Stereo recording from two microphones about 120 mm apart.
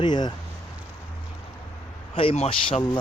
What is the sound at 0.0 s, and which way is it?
Speech, 40° left (ahead or behind).